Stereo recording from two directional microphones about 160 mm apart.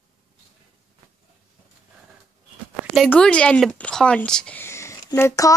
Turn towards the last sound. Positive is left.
turn(degrees=20)  # may be behind; listen again after turning